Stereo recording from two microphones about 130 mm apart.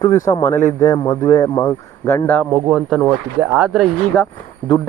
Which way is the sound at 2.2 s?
10° left (ahead or behind).